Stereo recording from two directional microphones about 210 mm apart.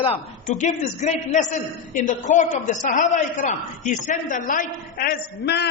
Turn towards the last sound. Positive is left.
turn(degrees=55)  # may be behind; listen again after turning